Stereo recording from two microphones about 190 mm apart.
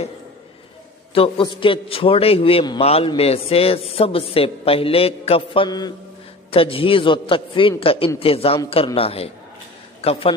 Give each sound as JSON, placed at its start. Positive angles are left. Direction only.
{"t": 1.1, "sound": "a man's voice", "side_deg": 30}